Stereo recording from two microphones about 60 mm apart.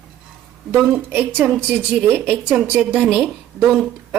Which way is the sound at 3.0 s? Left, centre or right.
Centre.